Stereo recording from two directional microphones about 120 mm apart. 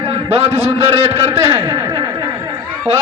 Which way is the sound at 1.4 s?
30° right (ahead or behind).